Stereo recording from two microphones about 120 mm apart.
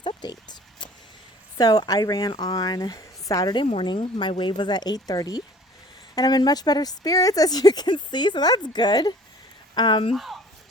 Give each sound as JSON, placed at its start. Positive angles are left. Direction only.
{"t": 0.0, "sound": "a sound", "side_deg": 35}
{"t": 1.5, "sound": "speech", "side_deg": 35}
{"t": 10.1, "sound": "speech", "side_deg": 0}